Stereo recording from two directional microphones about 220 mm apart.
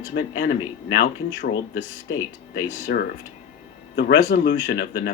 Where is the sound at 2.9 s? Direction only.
50° left (ahead or behind).